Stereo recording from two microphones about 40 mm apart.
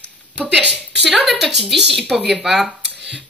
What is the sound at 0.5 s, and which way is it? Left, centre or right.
Speech, right.